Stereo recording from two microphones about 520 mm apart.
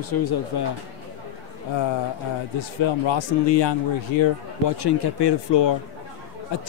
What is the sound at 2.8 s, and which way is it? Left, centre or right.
A man's voice, left.